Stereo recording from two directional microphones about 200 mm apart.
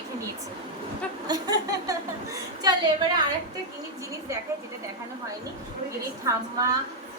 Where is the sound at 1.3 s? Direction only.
20° right (ahead or behind).